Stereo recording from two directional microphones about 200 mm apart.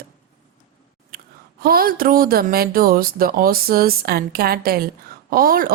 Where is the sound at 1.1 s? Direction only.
45° right (ahead or behind).